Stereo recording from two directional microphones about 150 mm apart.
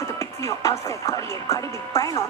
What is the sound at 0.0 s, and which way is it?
Speech, 20° left (ahead or behind).